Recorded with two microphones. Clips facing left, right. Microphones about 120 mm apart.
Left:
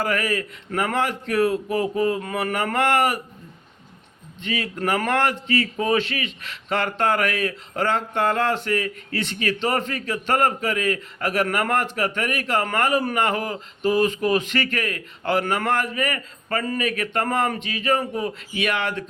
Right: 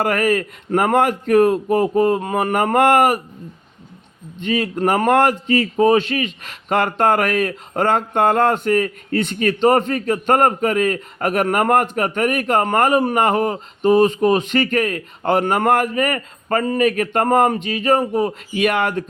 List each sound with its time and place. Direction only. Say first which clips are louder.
0.0 s speech: right 6 dB; 50° right (ahead or behind)
4.4 s speech: right 7 dB; 40° right (ahead or behind)